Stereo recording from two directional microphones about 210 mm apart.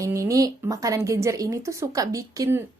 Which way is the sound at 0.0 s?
15° right (ahead or behind).